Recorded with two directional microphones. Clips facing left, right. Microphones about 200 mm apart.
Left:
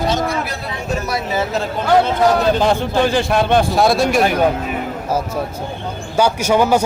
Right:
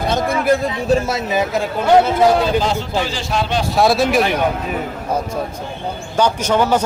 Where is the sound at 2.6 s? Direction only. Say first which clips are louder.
Left 4 dB; 55° left (ahead or behind).